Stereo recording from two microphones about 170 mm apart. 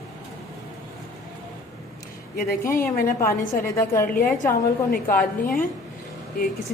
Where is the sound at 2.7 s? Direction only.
55° left (ahead or behind).